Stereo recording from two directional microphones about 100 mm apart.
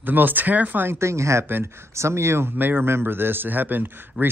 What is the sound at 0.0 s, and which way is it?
Speech, 20° right (ahead or behind).